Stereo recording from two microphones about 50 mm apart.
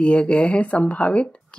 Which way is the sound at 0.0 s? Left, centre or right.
Left.